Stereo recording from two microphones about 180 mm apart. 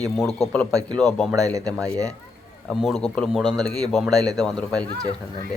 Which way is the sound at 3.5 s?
20° right (ahead or behind).